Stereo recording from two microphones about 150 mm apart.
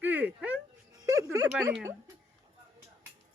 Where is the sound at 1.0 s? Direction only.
25° right (ahead or behind).